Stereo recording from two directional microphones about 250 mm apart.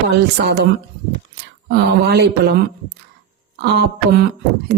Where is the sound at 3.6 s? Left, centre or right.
Right.